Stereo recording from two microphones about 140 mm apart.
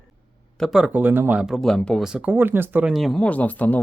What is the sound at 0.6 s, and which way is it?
Speech, 5° right (ahead or behind).